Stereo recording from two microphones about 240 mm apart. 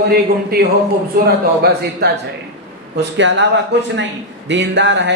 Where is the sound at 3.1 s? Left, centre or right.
Right.